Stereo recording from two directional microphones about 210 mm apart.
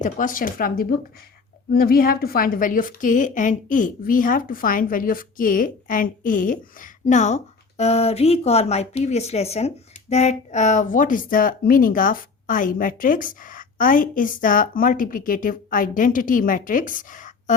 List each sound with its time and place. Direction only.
0.0 s a woman's voice: 40° left (ahead or behind)